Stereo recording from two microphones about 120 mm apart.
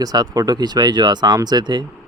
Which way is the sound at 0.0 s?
30° right (ahead or behind).